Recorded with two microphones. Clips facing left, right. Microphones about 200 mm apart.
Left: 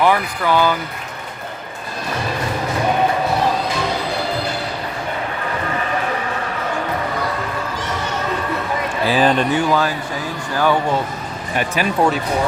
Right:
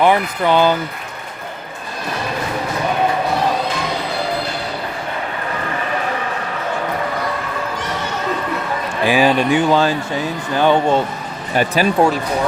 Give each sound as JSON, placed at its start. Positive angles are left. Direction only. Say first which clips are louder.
{"t": 0.0, "sound": "speech", "louder": "right 2 dB", "side_deg": -20}
{"t": 9.0, "sound": "speech", "louder": "right 2 dB", "side_deg": -10}
{"t": 9.6, "sound": "speech", "louder": "right 3 dB", "side_deg": -25}
{"t": 11.5, "sound": "speech", "louder": "right 4 dB", "side_deg": -35}